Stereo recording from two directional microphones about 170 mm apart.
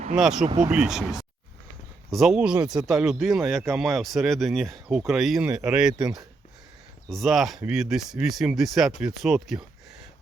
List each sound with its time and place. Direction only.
0.2 s speech: centre (ahead or behind)
5.9 s speech: 25° right (ahead or behind)
7.1 s speech: centre (ahead or behind)